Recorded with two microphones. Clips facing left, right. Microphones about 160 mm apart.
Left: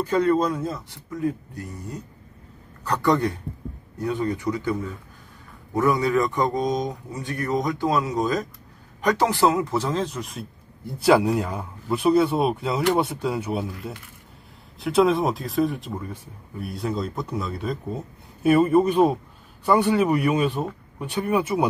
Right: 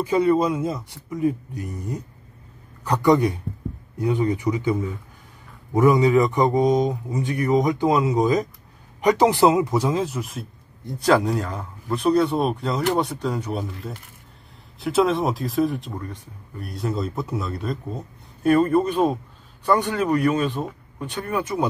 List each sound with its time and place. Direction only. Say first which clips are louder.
0.0 s speech: right 2 dB; 10° right (ahead or behind)
11.1 s speech: left 1 dB; 10° left (ahead or behind)